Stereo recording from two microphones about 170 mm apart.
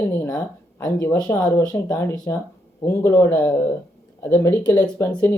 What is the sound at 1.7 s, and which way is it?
Speech, 20° left (ahead or behind).